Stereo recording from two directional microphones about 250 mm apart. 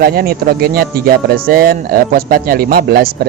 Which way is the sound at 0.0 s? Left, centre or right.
Right.